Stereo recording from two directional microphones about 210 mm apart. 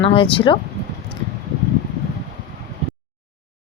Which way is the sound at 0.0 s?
25° left (ahead or behind).